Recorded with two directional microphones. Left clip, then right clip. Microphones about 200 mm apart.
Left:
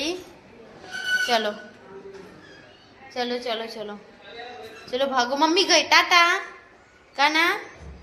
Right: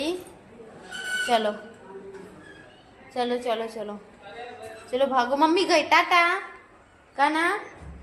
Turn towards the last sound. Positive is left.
turn(degrees=0)  # may be behind; listen again after turning